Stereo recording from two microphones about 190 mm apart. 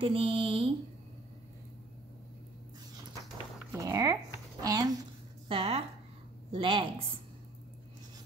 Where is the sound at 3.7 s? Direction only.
15° right (ahead or behind).